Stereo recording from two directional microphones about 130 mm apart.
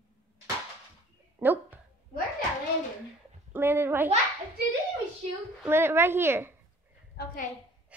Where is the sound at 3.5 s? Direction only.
20° right (ahead or behind).